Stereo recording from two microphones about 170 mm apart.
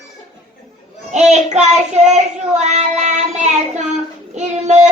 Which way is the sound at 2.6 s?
45° right (ahead or behind).